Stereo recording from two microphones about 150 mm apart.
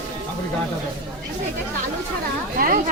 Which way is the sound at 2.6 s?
70° right (ahead or behind).